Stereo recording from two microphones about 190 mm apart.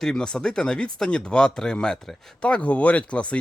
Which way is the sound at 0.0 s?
5° left (ahead or behind).